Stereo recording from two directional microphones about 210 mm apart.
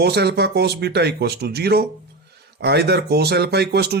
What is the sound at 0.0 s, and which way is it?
A man's voice, 50° right (ahead or behind).